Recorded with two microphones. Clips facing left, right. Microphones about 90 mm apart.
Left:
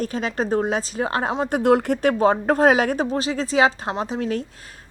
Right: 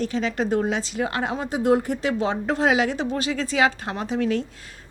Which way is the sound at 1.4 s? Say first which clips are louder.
Left 2 dB; 60° left (ahead or behind).